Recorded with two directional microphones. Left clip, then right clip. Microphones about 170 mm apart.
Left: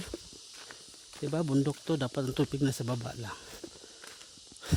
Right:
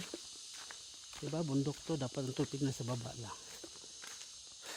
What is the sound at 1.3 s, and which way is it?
Speech, 45° left (ahead or behind).